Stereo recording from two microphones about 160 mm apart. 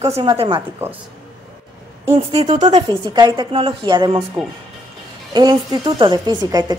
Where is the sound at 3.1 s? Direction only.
25° right (ahead or behind).